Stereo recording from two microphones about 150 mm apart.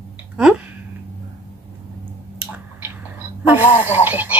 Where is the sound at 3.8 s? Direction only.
15° right (ahead or behind).